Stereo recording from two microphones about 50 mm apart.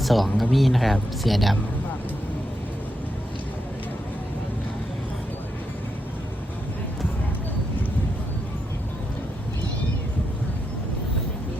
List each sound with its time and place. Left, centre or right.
0.0 s speech: centre